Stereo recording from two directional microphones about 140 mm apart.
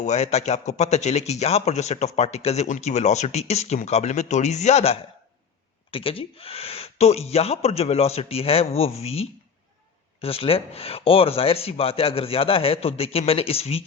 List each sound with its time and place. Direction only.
0.0 s speech: 55° left (ahead or behind)